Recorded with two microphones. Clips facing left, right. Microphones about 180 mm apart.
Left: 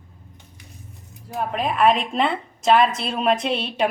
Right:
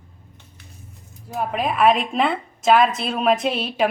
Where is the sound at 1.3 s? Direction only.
5° right (ahead or behind).